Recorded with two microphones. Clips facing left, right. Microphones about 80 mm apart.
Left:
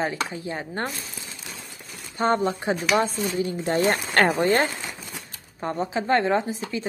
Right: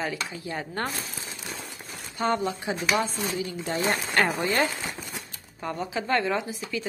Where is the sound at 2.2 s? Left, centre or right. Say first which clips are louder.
Left 4 dB; left.